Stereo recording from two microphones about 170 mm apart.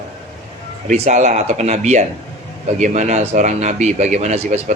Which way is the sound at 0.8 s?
40° right (ahead or behind).